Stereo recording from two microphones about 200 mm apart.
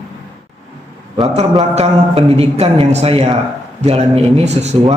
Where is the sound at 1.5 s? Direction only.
30° right (ahead or behind).